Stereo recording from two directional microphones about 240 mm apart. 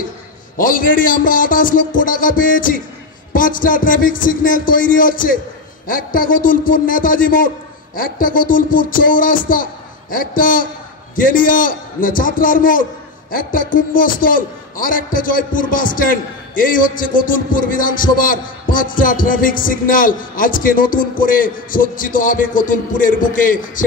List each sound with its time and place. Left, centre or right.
0.6 s a man's voice: left